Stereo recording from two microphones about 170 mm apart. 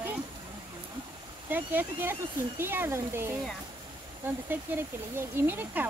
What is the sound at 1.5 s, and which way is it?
Speech, 10° right (ahead or behind).